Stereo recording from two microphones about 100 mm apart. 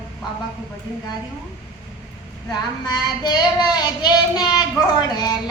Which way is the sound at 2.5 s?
45° left (ahead or behind).